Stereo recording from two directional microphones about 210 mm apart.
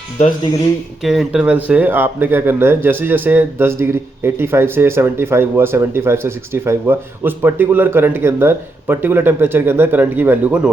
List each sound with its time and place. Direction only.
1.0 s speech: centre (ahead or behind)